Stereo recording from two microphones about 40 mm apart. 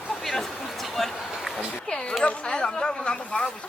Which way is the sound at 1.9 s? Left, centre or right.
Centre.